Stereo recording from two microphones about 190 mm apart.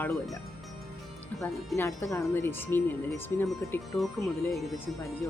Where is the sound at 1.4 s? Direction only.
10° left (ahead or behind).